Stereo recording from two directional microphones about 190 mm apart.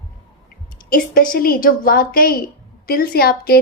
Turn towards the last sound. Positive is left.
turn(degrees=55)  # may be behind; listen again after turning